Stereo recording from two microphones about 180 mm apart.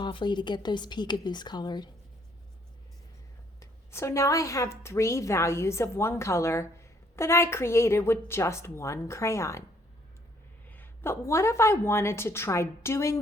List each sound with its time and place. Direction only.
0.0 s a woman's voice: 25° left (ahead or behind)
3.6 s a woman's voice: 15° left (ahead or behind)
10.7 s a woman's voice: 10° left (ahead or behind)